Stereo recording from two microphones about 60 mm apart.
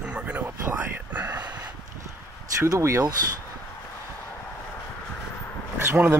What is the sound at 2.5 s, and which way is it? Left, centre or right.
Speech, right.